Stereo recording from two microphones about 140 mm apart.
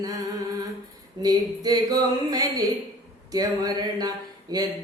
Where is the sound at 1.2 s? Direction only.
25° right (ahead or behind).